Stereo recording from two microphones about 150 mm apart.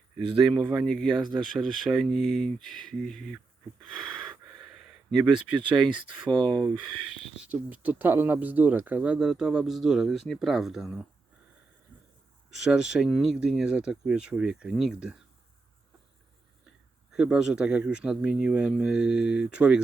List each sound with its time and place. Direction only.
0.7 s speech: centre (ahead or behind)
4.0 s gasp: 30° right (ahead or behind)
4.7 s speech: 5° right (ahead or behind)
6.4 s speech: 5° left (ahead or behind)
7.4 s speech: 10° right (ahead or behind)
12.6 s speech: 5° right (ahead or behind)
17.1 s speech: 5° right (ahead or behind)